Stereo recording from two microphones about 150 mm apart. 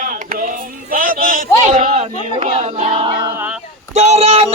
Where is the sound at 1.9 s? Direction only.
40° right (ahead or behind).